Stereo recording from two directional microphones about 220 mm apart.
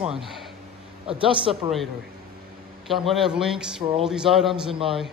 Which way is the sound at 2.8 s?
Centre (ahead or behind).